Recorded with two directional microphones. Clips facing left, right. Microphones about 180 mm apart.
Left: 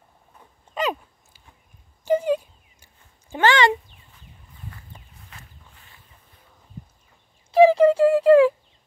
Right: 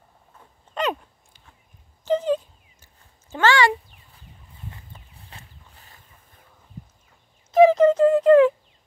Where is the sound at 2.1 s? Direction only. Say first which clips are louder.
Left 1 dB; 10° left (ahead or behind).